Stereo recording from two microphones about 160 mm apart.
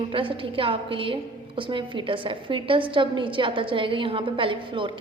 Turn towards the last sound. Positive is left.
turn(degrees=-30)  # may be behind; listen again after turning